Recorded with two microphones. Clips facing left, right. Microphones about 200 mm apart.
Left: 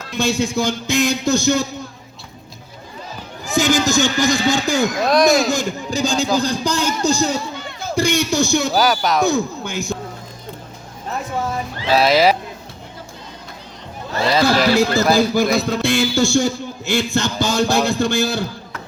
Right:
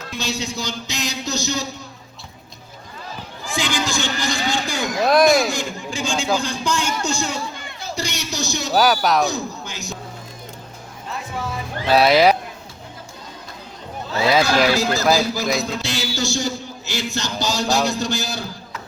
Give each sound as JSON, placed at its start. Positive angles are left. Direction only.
{"t": 0.2, "sound": "a man's voice", "side_deg": 50}
{"t": 3.4, "sound": "a man's voice", "side_deg": 45}
{"t": 7.8, "sound": "a man's voice", "side_deg": 55}
{"t": 8.7, "sound": "speech", "side_deg": 0}
{"t": 9.2, "sound": "a man's voice", "side_deg": 55}
{"t": 11.9, "sound": "speech", "side_deg": 0}
{"t": 14.4, "sound": "a man's voice", "side_deg": 55}